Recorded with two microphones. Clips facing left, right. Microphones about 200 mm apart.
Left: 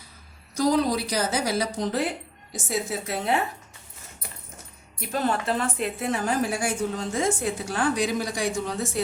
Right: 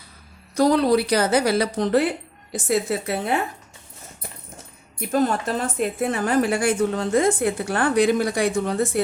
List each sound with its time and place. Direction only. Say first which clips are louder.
0.5 s a woman's voice: right 5 dB; 65° right (ahead or behind)
4.9 s a woman's voice: right 5 dB; 45° right (ahead or behind)